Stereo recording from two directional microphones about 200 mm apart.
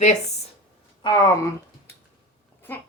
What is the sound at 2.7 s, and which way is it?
Speech, 10° left (ahead or behind).